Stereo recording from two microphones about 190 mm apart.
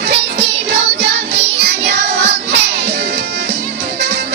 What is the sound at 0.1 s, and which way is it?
Music, 65° right (ahead or behind).